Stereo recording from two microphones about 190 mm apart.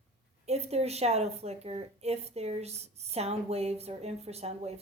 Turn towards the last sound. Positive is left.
turn(degrees=-35)  # may be behind; listen again after turning